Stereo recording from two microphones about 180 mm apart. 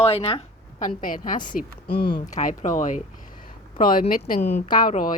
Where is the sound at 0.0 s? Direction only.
35° left (ahead or behind).